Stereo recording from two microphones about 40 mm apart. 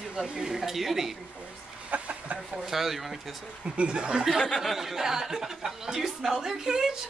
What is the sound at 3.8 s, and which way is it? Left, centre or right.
Speech, right.